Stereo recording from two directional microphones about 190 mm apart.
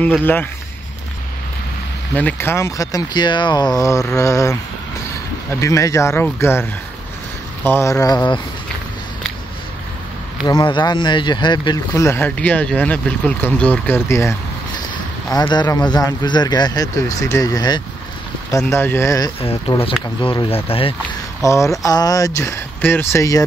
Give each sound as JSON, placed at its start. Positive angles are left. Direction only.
{"t": 0.0, "sound": "speech", "side_deg": 10}
{"t": 2.1, "sound": "speech", "side_deg": 10}
{"t": 10.4, "sound": "speech", "side_deg": 25}
{"t": 15.3, "sound": "speech", "side_deg": 20}
{"t": 19.4, "sound": "speech", "side_deg": 30}
{"t": 21.4, "sound": "speech", "side_deg": 15}